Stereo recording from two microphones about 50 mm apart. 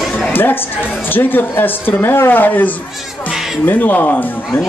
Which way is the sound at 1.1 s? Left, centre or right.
Left.